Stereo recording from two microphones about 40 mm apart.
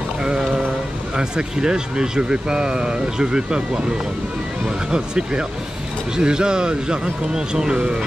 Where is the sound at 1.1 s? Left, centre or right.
Right.